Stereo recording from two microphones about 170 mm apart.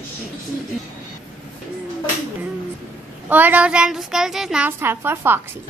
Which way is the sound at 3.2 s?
10° right (ahead or behind).